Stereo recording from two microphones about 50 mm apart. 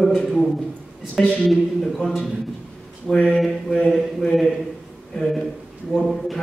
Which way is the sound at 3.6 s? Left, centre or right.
Centre.